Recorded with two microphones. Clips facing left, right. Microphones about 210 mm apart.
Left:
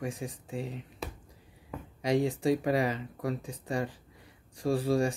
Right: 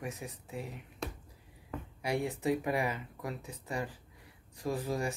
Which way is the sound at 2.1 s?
30° left (ahead or behind).